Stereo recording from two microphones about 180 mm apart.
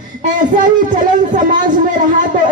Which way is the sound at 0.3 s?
45° right (ahead or behind).